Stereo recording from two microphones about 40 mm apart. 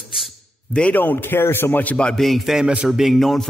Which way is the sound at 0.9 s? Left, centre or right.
Left.